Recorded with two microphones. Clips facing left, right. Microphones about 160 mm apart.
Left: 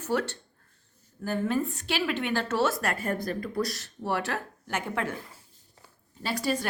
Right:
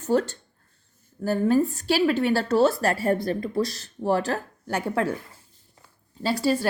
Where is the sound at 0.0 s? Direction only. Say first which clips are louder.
Right 6 dB; 30° right (ahead or behind).